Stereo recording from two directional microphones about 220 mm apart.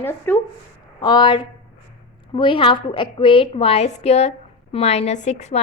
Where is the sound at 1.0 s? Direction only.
20° left (ahead or behind).